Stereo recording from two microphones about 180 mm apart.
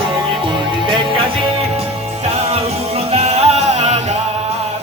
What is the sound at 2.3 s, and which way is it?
Music, 35° right (ahead or behind).